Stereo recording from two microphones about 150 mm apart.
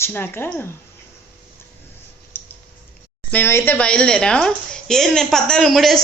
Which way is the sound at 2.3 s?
15° left (ahead or behind).